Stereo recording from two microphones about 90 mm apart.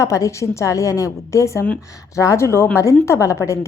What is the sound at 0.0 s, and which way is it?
A woman's voice, 35° left (ahead or behind).